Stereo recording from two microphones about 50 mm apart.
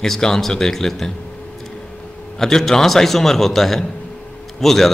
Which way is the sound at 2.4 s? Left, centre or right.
Centre.